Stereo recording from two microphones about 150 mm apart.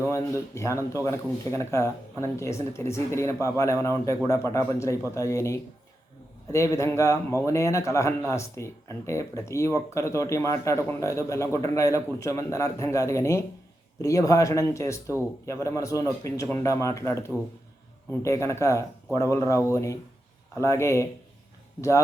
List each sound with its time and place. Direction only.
0.1 s speech: 20° left (ahead or behind)